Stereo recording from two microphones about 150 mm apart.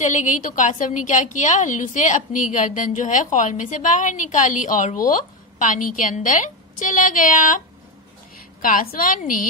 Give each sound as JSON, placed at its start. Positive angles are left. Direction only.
{"t": 0.0, "sound": "a woman's voice", "side_deg": 55}